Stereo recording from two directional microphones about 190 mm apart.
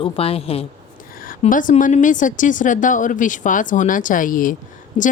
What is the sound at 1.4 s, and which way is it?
Speech, 40° left (ahead or behind).